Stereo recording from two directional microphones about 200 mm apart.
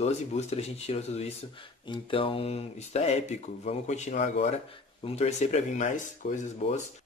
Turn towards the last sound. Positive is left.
turn(degrees=35)  # may be behind; listen again after turning